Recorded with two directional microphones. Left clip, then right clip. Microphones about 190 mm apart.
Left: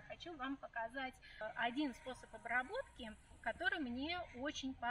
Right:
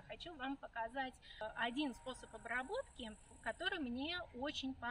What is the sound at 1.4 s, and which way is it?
A woman's voice, 20° right (ahead or behind).